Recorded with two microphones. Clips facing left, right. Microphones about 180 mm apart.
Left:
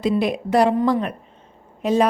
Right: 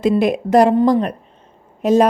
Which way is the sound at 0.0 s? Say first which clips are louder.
Right 5 dB; 45° right (ahead or behind).